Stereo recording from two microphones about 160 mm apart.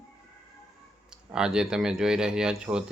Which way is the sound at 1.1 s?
5° right (ahead or behind).